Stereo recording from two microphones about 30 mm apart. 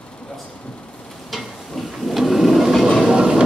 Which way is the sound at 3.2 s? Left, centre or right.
Right.